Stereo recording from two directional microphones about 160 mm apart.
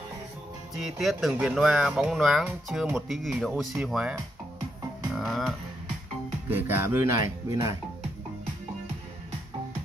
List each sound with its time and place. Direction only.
0.7 s speech: centre (ahead or behind)
5.1 s music: centre (ahead or behind)
6.5 s speech: 15° right (ahead or behind)